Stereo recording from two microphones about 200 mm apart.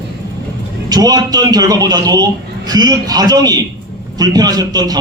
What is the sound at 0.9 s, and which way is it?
A man's voice, 20° right (ahead or behind).